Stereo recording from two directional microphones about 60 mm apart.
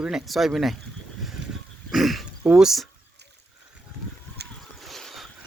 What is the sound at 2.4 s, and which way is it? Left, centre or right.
Speech, centre.